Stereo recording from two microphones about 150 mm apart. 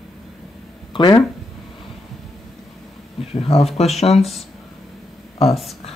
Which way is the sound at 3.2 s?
40° left (ahead or behind).